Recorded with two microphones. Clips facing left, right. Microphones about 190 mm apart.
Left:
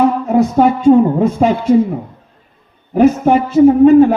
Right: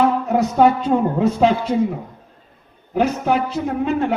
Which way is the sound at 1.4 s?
55° left (ahead or behind).